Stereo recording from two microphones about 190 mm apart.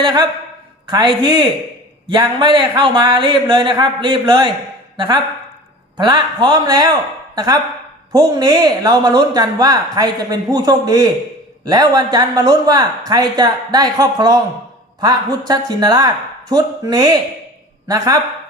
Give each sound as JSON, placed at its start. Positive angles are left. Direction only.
{"t": 0.0, "sound": "speech", "side_deg": -25}